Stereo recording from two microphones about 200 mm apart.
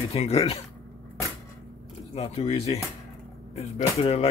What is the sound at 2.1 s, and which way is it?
Speech, 30° left (ahead or behind).